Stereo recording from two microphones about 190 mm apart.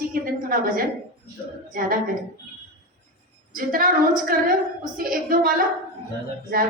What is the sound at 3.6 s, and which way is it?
A woman's voice, 45° right (ahead or behind).